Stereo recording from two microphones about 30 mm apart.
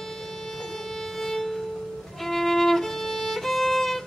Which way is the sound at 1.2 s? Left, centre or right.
Centre.